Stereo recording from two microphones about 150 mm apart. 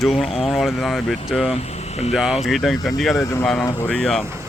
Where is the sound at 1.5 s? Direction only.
45° left (ahead or behind).